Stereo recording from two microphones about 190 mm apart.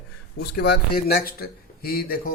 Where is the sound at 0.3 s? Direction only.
55° left (ahead or behind).